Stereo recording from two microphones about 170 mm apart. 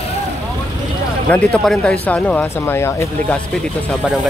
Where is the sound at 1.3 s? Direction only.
5° left (ahead or behind).